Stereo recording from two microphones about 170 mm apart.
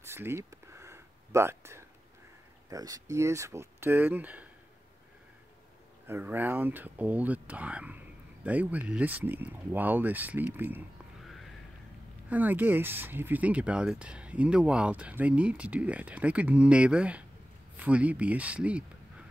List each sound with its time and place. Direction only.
0.0 s a sound: 15° right (ahead or behind)
2.7 s speech: 20° right (ahead or behind)
6.0 s speech: 10° right (ahead or behind)
12.3 s speech: 10° right (ahead or behind)